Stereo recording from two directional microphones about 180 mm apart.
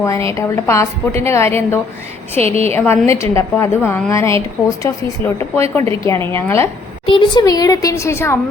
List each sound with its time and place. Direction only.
0.0 s a woman's voice: 15° left (ahead or behind)
7.1 s a woman's voice: 25° left (ahead or behind)